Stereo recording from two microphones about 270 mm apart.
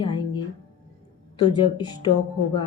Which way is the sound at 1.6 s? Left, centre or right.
Centre.